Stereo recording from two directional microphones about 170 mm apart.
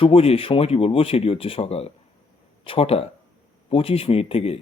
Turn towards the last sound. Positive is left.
turn(degrees=35)  # may be behind; listen again after turning